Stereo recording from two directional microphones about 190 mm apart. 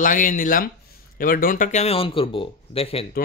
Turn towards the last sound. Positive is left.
turn(degrees=30)  # may be behind; listen again after turning